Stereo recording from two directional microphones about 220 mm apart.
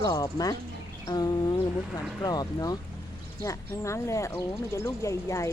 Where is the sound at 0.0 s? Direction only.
15° left (ahead or behind).